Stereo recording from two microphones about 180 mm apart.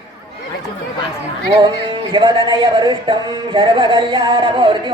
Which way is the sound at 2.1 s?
25° right (ahead or behind).